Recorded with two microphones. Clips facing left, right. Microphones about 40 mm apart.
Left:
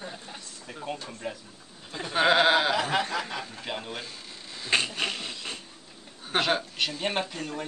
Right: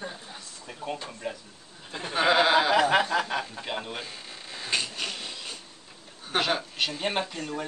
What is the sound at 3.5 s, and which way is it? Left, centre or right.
Speech, centre.